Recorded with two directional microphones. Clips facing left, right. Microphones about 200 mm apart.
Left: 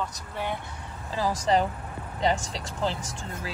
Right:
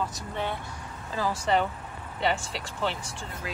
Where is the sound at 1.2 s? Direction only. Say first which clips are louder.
Left 2 dB; 35° left (ahead or behind).